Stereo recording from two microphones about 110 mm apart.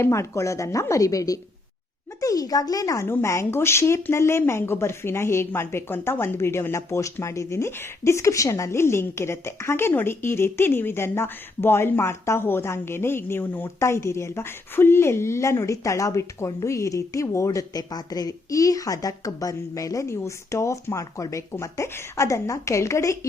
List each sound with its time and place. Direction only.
0.0 s speech: 25° left (ahead or behind)